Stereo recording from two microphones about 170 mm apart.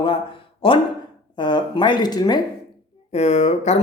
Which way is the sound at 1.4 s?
30° left (ahead or behind).